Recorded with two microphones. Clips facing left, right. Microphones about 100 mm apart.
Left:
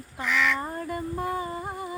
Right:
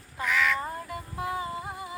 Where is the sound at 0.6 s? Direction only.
45° left (ahead or behind).